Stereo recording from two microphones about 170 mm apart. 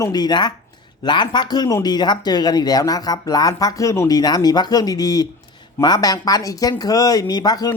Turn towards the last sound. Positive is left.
turn(degrees=25)  # may be behind; listen again after turning